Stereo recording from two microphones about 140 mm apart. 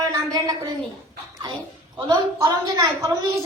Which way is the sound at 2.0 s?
35° right (ahead or behind).